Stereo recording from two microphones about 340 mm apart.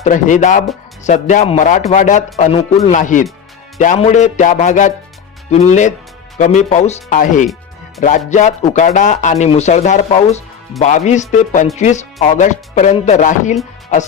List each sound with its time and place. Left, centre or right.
0.0 s speech: left
6.4 s speech: left